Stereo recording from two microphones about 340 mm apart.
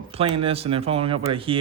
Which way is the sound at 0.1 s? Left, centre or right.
Centre.